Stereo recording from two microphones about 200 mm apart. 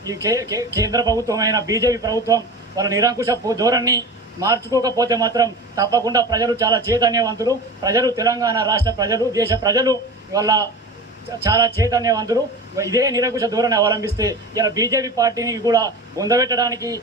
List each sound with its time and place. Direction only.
0.0 s a man's voice: 15° right (ahead or behind)